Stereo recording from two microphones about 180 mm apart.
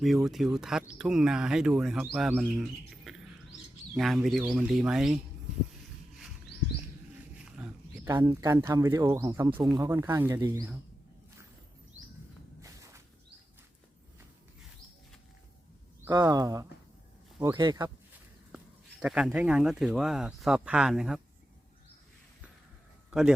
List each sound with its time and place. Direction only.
0.0 s speech: centre (ahead or behind)
7.4 s pig: 5° right (ahead or behind)
8.0 s speech: 15° right (ahead or behind)
12.6 s a sound: 20° right (ahead or behind)
16.1 s speech: 20° right (ahead or behind)
18.5 s speech: 5° right (ahead or behind)